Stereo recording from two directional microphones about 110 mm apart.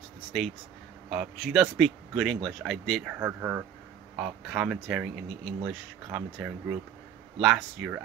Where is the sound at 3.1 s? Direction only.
20° right (ahead or behind).